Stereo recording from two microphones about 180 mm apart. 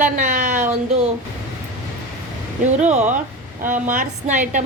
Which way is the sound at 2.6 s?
40° right (ahead or behind).